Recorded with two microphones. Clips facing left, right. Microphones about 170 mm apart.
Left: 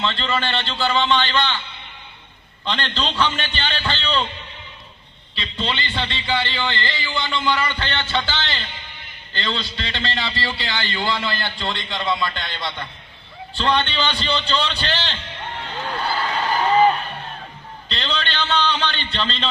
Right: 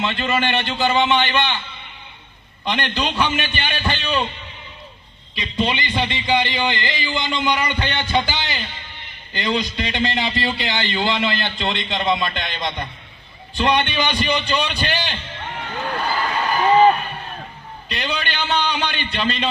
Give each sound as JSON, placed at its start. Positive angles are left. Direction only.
{"t": 0.0, "sound": "a man's voice", "side_deg": -15}
{"t": 2.6, "sound": "a man's voice", "side_deg": -15}
{"t": 5.3, "sound": "a man's voice", "side_deg": -15}
{"t": 17.8, "sound": "a man's voice", "side_deg": -15}